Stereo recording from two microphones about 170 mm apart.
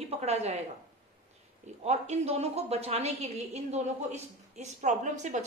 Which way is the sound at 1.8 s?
40° right (ahead or behind).